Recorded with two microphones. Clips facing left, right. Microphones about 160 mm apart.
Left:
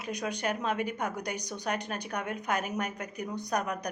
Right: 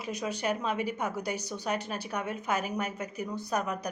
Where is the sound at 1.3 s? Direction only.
15° left (ahead or behind).